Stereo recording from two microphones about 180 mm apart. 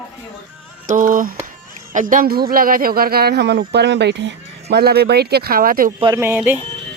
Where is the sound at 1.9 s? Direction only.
45° right (ahead or behind).